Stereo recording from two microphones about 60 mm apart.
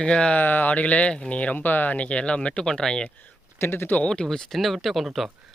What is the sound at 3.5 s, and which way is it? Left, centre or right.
Speech, left.